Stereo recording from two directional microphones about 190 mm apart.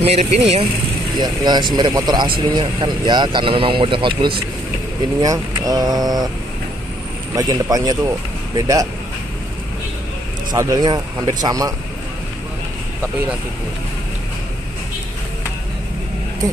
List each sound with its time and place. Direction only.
0.0 s speech: 35° right (ahead or behind)
1.1 s speech: 20° right (ahead or behind)
7.3 s speech: 20° right (ahead or behind)
10.5 s speech: 20° right (ahead or behind)